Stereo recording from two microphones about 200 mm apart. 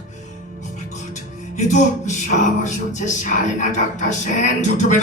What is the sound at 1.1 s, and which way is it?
Music, 40° left (ahead or behind).